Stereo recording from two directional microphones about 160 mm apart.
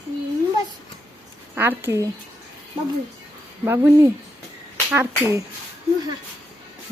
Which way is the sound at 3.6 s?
15° right (ahead or behind).